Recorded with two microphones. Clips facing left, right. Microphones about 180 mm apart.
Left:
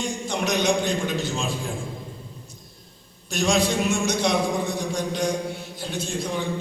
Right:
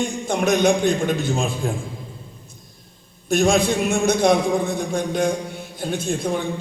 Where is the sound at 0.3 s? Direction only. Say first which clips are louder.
Right 5 dB; 55° right (ahead or behind).